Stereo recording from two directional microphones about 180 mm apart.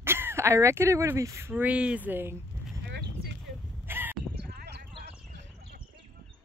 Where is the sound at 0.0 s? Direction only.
15° right (ahead or behind).